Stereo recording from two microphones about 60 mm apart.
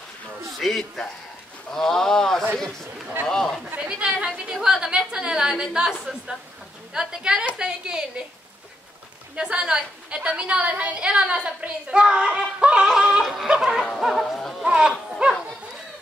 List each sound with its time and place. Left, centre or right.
0.6 s music: centre
1.7 s speech: centre
3.7 s speech: right
4.5 s a woman's voice: centre
9.3 s a woman's voice: centre
13.2 s music: centre
13.5 s a woman's voice: centre
13.8 s music: centre
14.7 s a woman's voice: centre